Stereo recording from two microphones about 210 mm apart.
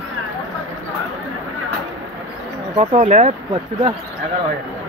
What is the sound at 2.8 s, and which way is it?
Speech, 30° right (ahead or behind).